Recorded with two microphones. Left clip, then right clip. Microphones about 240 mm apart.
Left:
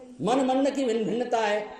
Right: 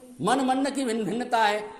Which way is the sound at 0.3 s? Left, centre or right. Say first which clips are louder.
Even; right.